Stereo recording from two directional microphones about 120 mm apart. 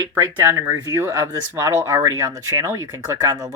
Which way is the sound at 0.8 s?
30° right (ahead or behind).